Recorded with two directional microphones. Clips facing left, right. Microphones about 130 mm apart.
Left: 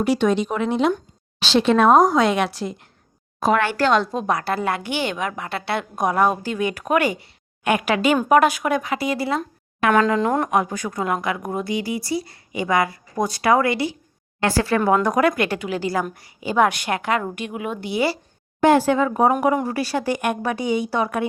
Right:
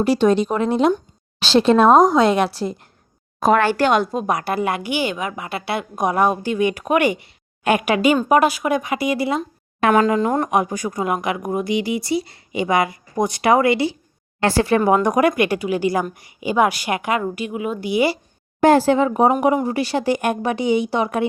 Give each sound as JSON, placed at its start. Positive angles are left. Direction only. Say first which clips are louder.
{"t": 0.0, "sound": "a woman's voice", "louder": "right 3 dB", "side_deg": -35}
{"t": 3.8, "sound": "a woman's voice", "louder": "right 1 dB", "side_deg": -15}
{"t": 10.2, "sound": "speech", "louder": "right 1 dB", "side_deg": 0}
{"t": 10.5, "sound": "a woman's voice", "louder": "right 2 dB", "side_deg": -15}
{"t": 17.2, "sound": "a woman's voice", "louder": "right 3 dB", "side_deg": -5}
{"t": 18.6, "sound": "speech", "louder": "right 2 dB", "side_deg": -35}